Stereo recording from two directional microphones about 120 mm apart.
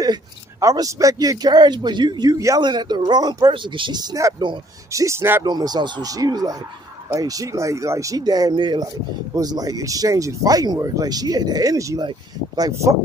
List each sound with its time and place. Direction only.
0.0 s speech: 30° right (ahead or behind)
4.9 s speech: 25° right (ahead or behind)
5.4 s speech: 35° right (ahead or behind)